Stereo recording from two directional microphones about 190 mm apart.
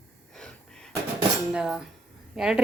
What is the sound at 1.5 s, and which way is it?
A woman's voice, 5° right (ahead or behind).